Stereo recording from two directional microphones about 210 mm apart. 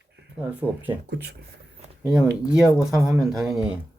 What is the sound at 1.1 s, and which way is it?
Speech, 50° right (ahead or behind).